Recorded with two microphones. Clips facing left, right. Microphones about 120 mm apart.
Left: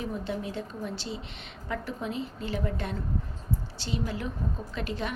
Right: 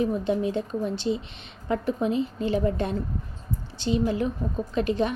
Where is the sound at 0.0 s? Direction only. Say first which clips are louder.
Right 9 dB; 20° right (ahead or behind).